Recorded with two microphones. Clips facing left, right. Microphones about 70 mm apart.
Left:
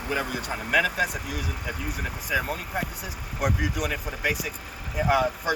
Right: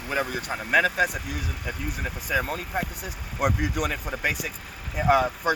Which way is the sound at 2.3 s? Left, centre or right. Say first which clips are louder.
Right 1 dB; right.